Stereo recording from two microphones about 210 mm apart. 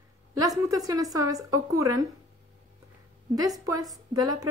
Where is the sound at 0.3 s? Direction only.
15° right (ahead or behind).